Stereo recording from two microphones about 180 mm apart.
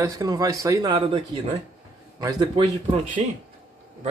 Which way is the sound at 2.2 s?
20° right (ahead or behind).